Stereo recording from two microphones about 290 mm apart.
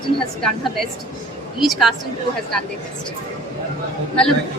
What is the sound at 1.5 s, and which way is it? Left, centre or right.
Speech, centre.